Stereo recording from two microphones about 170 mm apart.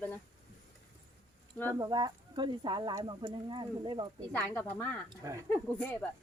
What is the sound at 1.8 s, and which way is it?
Speech, 25° right (ahead or behind).